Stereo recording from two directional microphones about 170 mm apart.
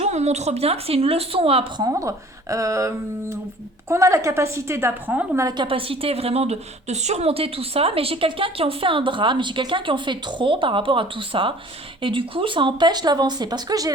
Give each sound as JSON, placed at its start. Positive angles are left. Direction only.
{"t": 0.0, "sound": "a woman's voice", "side_deg": -40}
{"t": 1.9, "sound": "a woman's voice", "side_deg": -20}
{"t": 5.5, "sound": "a woman's voice", "side_deg": -30}